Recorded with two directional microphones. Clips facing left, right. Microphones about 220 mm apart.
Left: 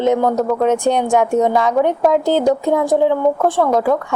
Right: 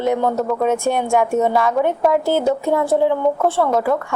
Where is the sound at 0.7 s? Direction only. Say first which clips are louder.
Left 3 dB; 20° left (ahead or behind).